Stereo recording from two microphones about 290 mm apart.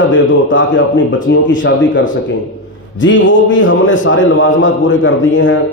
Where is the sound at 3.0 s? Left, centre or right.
Left.